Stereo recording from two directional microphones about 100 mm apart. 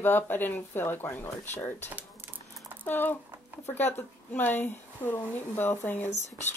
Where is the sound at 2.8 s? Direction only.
20° left (ahead or behind).